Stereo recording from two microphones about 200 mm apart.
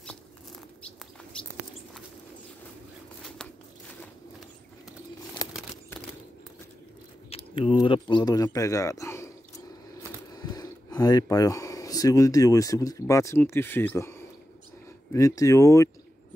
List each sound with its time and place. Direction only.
5.4 s a sound: 20° left (ahead or behind)
7.2 s speech: 30° left (ahead or behind)
10.3 s speech: 20° left (ahead or behind)